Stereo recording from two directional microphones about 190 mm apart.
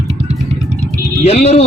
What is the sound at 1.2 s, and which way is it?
Speech, 35° left (ahead or behind).